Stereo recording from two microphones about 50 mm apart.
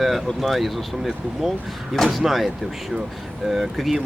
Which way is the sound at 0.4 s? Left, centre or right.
Centre.